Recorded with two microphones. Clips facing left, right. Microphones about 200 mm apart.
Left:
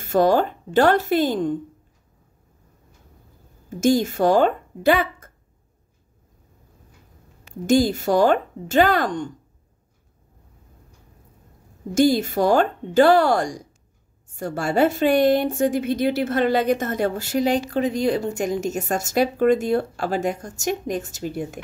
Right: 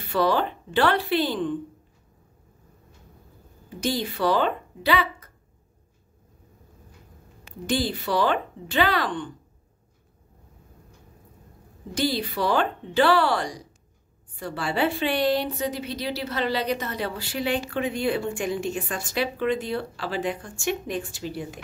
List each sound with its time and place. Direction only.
0.0 s a woman's voice: 45° left (ahead or behind)
3.6 s speech: 45° left (ahead or behind)
7.6 s a woman's voice: 45° left (ahead or behind)
11.9 s a woman's voice: 45° left (ahead or behind)